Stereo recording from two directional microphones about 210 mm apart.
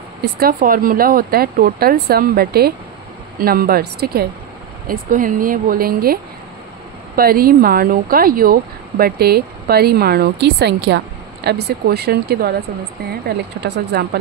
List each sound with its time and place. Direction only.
0.2 s a woman's voice: 45° right (ahead or behind)
7.2 s a woman's voice: 45° right (ahead or behind)
13.6 s a woman's voice: 50° right (ahead or behind)